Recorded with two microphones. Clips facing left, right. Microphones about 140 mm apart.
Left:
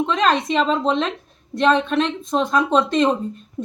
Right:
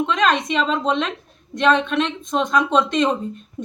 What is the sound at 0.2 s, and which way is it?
Speech, 30° left (ahead or behind).